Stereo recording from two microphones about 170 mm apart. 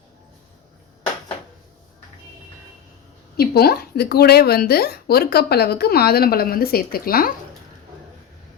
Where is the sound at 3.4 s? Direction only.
65° left (ahead or behind).